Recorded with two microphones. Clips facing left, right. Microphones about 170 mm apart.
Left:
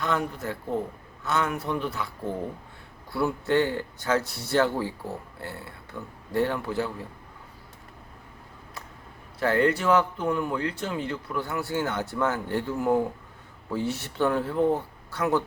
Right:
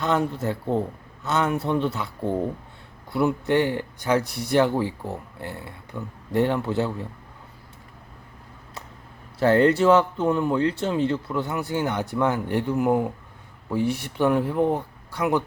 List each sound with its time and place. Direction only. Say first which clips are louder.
0.0 s speech: right 5 dB; 25° right (ahead or behind)
3.1 s speech: right 3 dB; 20° right (ahead or behind)
9.4 s speech: right 6 dB; 25° right (ahead or behind)